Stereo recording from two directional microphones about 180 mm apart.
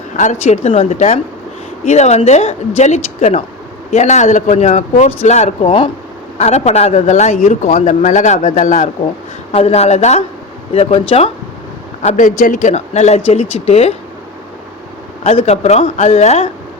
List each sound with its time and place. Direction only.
0.2 s a man's voice: 40° left (ahead or behind)
12.0 s a man's voice: 45° left (ahead or behind)
15.2 s a man's voice: 35° left (ahead or behind)